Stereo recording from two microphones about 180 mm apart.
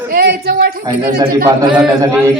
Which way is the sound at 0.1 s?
55° right (ahead or behind).